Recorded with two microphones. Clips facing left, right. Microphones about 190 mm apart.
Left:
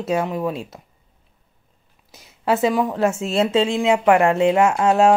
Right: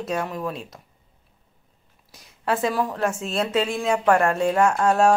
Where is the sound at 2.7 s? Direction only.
20° left (ahead or behind).